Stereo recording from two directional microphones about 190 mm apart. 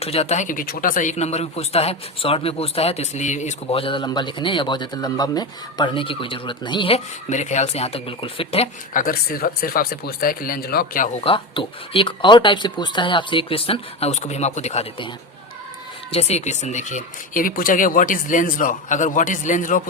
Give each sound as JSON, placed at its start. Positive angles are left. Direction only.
{"t": 0.0, "sound": "speech", "side_deg": 35}
{"t": 8.9, "sound": "speech", "side_deg": 45}
{"t": 11.2, "sound": "speech", "side_deg": 30}
{"t": 16.1, "sound": "speech", "side_deg": 35}